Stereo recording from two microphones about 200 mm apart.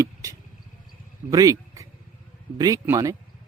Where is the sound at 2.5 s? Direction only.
15° right (ahead or behind).